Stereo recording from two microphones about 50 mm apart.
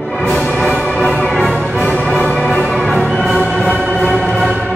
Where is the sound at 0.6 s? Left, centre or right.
Left.